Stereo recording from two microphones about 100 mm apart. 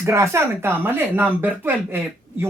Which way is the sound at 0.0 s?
30° right (ahead or behind).